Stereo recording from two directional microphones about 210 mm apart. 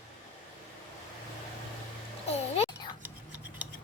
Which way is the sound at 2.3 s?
30° left (ahead or behind).